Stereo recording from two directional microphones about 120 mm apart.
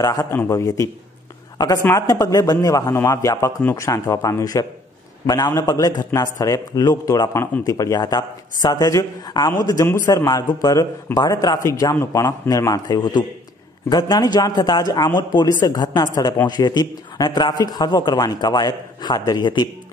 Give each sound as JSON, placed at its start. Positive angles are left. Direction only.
{"t": 0.0, "sound": "speech", "side_deg": 30}